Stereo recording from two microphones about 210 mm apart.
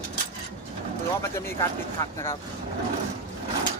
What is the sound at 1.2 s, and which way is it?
Speech, 15° left (ahead or behind).